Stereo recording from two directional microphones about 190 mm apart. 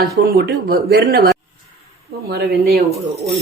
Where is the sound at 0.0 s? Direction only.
60° right (ahead or behind).